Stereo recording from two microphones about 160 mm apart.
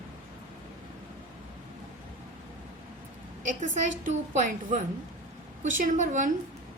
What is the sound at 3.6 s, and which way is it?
A woman's voice, 45° right (ahead or behind).